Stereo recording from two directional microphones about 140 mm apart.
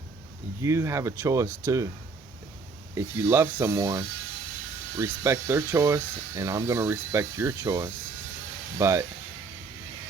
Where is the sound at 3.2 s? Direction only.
15° right (ahead or behind).